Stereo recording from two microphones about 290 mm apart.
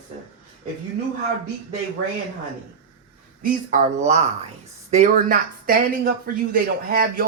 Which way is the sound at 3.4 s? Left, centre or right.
Right.